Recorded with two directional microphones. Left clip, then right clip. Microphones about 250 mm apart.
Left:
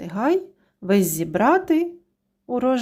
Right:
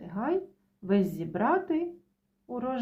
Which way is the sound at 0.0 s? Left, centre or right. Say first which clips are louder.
Left 9 dB; left.